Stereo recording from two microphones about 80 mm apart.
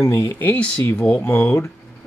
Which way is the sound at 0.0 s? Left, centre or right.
Left.